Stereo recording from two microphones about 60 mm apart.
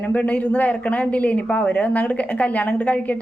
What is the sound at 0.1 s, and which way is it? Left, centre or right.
A woman's voice, left.